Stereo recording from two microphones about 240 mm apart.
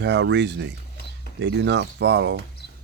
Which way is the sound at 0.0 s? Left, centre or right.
Right.